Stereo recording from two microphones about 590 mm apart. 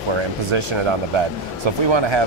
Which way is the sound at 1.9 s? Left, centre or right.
Right.